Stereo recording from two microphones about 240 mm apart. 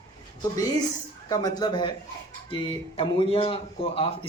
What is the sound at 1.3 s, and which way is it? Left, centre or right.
Speech, centre.